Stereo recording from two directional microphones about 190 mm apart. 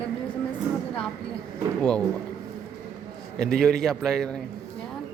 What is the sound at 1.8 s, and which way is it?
Speech, 5° left (ahead or behind).